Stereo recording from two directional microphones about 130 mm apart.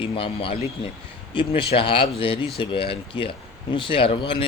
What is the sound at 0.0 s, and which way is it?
Speech, 45° left (ahead or behind).